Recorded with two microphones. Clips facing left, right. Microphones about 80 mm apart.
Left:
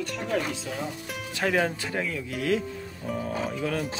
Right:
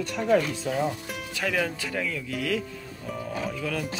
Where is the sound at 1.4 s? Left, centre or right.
Left.